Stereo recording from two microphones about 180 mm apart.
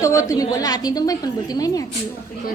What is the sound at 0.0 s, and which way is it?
A woman's voice, 15° left (ahead or behind).